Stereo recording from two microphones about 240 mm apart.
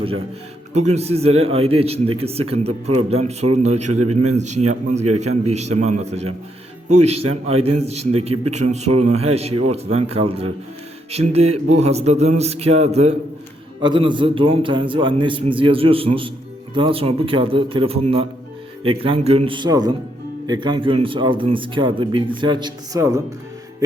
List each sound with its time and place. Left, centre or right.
0.7 s a man's voice: right
3.9 s a man's voice: right
4.4 s a man's voice: right
5.0 s a man's voice: right
5.3 s a man's voice: right